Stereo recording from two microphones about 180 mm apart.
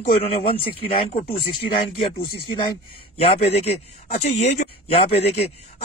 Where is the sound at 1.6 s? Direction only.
30° left (ahead or behind).